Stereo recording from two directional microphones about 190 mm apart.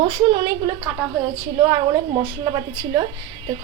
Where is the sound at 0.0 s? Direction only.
25° right (ahead or behind).